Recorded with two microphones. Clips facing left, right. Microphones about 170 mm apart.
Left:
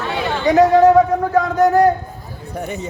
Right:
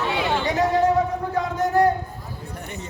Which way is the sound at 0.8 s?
85° left.